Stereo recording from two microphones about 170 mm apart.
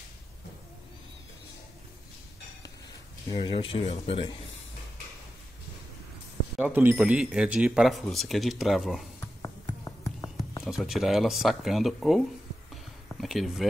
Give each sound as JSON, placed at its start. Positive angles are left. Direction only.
{"t": 3.3, "sound": "speech", "side_deg": 30}
{"t": 6.6, "sound": "speech", "side_deg": -10}
{"t": 10.6, "sound": "speech", "side_deg": 0}
{"t": 13.2, "sound": "speech", "side_deg": 0}